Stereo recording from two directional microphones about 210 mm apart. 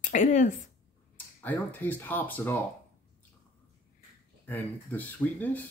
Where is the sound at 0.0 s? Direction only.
35° left (ahead or behind).